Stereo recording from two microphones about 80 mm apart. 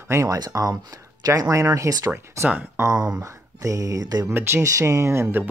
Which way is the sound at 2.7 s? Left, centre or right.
Right.